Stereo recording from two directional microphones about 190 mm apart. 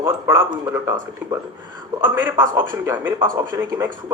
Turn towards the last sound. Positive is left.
turn(degrees=-15)  # may be behind; listen again after turning